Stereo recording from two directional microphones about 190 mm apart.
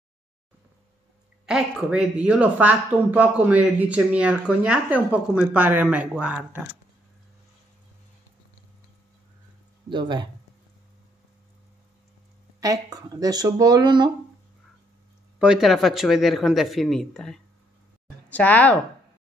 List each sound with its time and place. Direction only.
1.4 s speech: 5° right (ahead or behind)
9.8 s speech: 25° right (ahead or behind)
12.5 s speech: 15° right (ahead or behind)
15.3 s speech: 5° right (ahead or behind)